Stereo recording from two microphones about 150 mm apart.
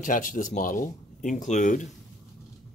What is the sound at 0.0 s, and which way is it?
Speech, 65° left (ahead or behind).